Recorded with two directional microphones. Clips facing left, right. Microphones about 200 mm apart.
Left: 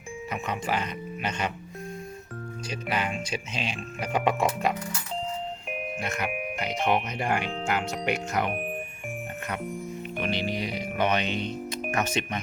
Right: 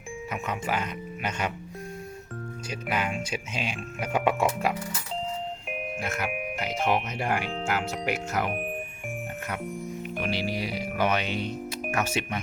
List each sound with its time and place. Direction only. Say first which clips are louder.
0.3 s speech: left 1 dB; 5° right (ahead or behind)
2.6 s speech: even; 10° right (ahead or behind)
6.0 s speech: even; 5° right (ahead or behind)
9.6 s speech: even; 5° right (ahead or behind)